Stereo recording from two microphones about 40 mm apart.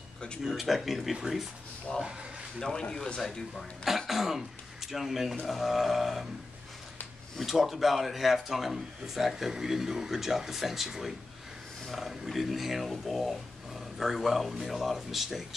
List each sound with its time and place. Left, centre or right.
0.6 s speech: centre
1.9 s speech: centre
4.1 s speech: centre
7.3 s speech: centre